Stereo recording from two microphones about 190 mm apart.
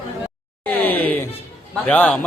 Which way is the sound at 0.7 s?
10° left (ahead or behind).